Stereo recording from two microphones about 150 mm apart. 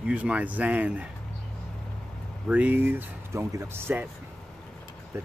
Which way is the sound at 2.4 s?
10° right (ahead or behind).